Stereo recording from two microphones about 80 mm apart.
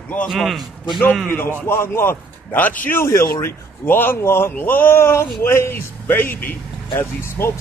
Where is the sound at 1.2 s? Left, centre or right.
Left.